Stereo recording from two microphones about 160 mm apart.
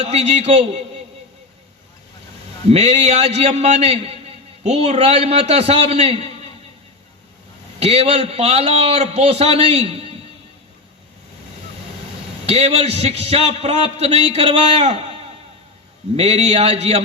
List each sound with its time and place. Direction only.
0.0 s a man's voice: 40° right (ahead or behind)
2.6 s a man's voice: 40° right (ahead or behind)
7.8 s a man's voice: 40° right (ahead or behind)
12.5 s a man's voice: 40° right (ahead or behind)
16.1 s a man's voice: 40° right (ahead or behind)